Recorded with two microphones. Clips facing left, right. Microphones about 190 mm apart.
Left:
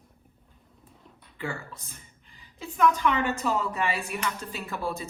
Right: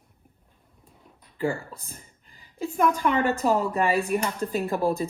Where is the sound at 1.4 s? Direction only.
35° right (ahead or behind).